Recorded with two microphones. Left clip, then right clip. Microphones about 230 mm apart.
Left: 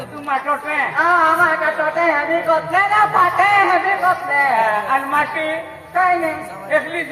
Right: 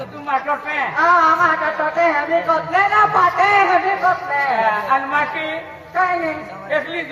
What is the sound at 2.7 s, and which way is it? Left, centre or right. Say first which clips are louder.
A man's voice: right 1 dB; left.